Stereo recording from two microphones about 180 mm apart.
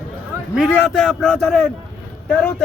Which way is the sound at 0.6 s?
Centre (ahead or behind).